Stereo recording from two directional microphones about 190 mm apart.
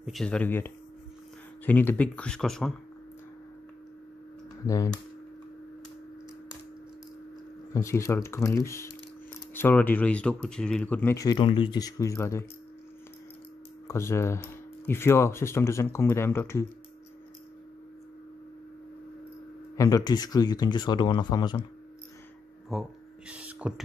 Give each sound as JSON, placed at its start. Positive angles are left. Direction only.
{"t": 0.0, "sound": "speech", "side_deg": 0}
{"t": 4.6, "sound": "speech", "side_deg": 15}
{"t": 7.7, "sound": "speech", "side_deg": 15}
{"t": 13.8, "sound": "speech", "side_deg": 15}
{"t": 19.8, "sound": "speech", "side_deg": 20}
{"t": 22.7, "sound": "a sound", "side_deg": -5}